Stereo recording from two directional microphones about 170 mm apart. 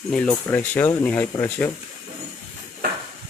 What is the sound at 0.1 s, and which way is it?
Speech, 5° left (ahead or behind).